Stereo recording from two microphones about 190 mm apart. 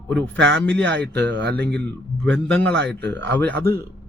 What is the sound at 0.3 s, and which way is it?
Speech, 70° right (ahead or behind).